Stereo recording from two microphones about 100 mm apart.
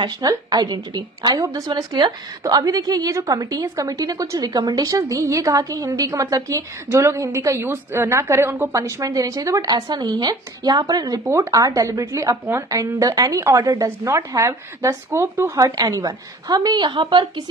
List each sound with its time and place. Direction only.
0.0 s a woman's voice: 40° right (ahead or behind)
15.6 s a woman's voice: 35° right (ahead or behind)